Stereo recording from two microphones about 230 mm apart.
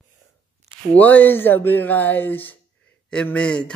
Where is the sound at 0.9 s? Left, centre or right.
Centre.